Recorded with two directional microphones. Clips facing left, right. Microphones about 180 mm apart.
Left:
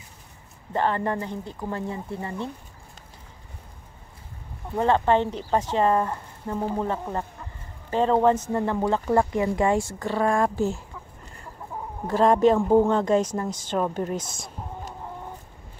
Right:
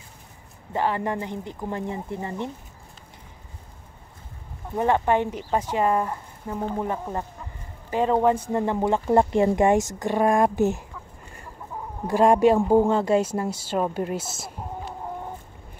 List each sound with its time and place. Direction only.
0.7 s speech: 10° right (ahead or behind)
4.7 s speech: 10° right (ahead or behind)
12.1 s speech: 10° right (ahead or behind)